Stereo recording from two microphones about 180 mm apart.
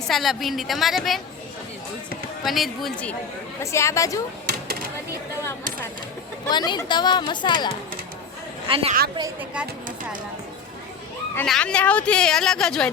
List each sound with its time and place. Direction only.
0.1 s speech: centre (ahead or behind)
2.4 s speech: centre (ahead or behind)
3.6 s a woman's voice: 15° left (ahead or behind)
6.5 s speech: 25° left (ahead or behind)
8.6 s a woman's voice: 30° right (ahead or behind)
11.3 s speech: 5° left (ahead or behind)